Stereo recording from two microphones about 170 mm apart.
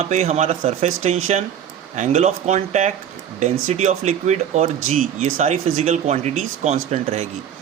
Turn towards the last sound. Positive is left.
turn(degrees=-40)  # may be behind; listen again after turning